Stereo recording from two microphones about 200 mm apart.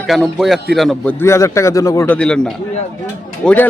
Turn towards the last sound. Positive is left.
turn(degrees=10)  # may be behind; listen again after turning